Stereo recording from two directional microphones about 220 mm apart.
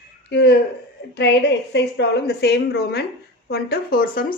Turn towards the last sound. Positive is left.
turn(degrees=40)  # may be behind; listen again after turning